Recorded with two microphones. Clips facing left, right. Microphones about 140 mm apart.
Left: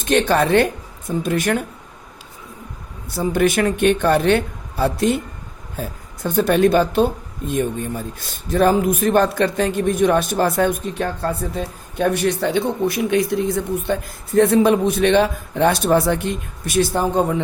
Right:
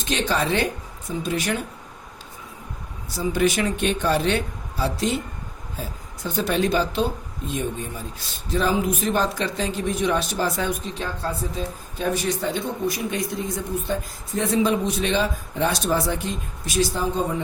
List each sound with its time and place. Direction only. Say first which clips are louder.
0.0 s a man's voice: left 7 dB; 55° left (ahead or behind)
3.2 s a man's voice: left 4 dB; 55° left (ahead or behind)
6.2 s a man's voice: left 7 dB; 55° left (ahead or behind)